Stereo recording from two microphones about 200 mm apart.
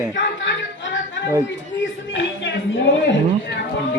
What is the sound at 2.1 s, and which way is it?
Speech, 65° left (ahead or behind).